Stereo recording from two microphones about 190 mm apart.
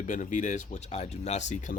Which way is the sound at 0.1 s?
40° left (ahead or behind).